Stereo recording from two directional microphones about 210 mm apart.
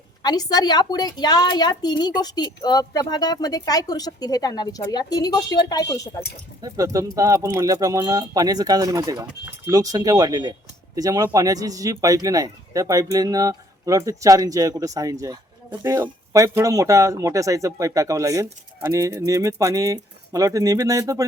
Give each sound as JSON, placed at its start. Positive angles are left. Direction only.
{"t": 0.2, "sound": "speech", "side_deg": 20}
{"t": 6.6, "sound": "speech", "side_deg": -15}